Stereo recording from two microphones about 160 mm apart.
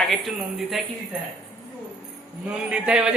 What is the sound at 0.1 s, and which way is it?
Speech, centre (ahead or behind).